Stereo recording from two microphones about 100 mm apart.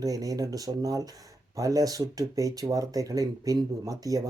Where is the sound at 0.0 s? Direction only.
35° right (ahead or behind).